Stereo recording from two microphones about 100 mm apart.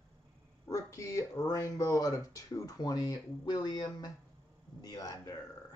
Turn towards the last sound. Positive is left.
turn(degrees=40)  # may be behind; listen again after turning